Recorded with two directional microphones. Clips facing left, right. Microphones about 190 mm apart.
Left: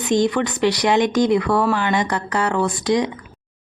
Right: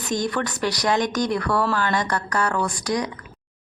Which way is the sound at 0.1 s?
20° left (ahead or behind).